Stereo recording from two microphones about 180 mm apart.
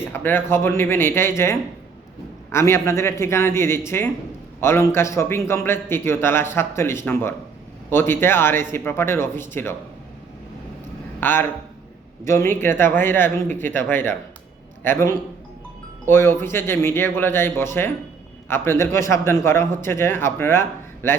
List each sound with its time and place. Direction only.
0.0 s a man's voice: 10° left (ahead or behind)
11.2 s a man's voice: 10° left (ahead or behind)